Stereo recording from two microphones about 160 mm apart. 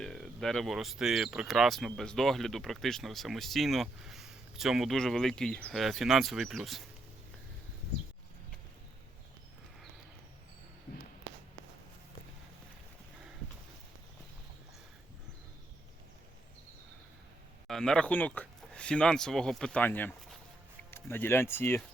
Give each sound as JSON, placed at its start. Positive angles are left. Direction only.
{"t": 0.0, "sound": "speech", "side_deg": 0}
{"t": 17.7, "sound": "speech", "side_deg": 5}